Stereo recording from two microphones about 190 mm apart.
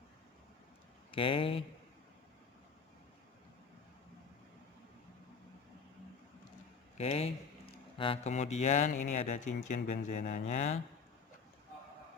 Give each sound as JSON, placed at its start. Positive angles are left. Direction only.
{"t": 1.1, "sound": "speech", "side_deg": 30}
{"t": 7.0, "sound": "speech", "side_deg": 35}